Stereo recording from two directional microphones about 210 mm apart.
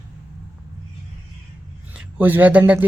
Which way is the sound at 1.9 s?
5° right (ahead or behind).